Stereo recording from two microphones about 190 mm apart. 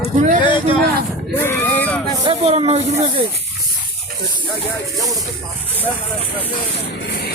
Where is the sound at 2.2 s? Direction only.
30° right (ahead or behind).